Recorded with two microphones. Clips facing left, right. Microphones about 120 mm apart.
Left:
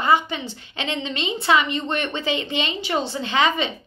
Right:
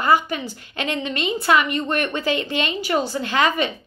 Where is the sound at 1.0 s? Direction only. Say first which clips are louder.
Right 3 dB; 25° left (ahead or behind).